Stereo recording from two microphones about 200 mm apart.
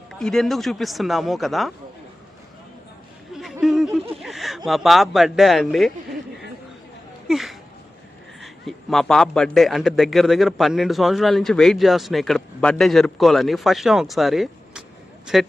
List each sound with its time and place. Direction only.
0.2 s a man's voice: centre (ahead or behind)
3.3 s a sound: centre (ahead or behind)
4.2 s speech: centre (ahead or behind)
7.3 s a man's voice: centre (ahead or behind)